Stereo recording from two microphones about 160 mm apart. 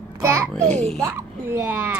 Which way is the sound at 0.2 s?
15° right (ahead or behind).